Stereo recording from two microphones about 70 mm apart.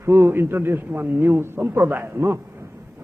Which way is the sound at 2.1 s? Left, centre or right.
Right.